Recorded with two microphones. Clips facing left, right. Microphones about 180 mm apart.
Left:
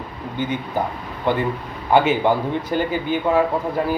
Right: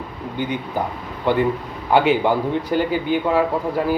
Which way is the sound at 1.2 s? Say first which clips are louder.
Right 3 dB; 10° right (ahead or behind).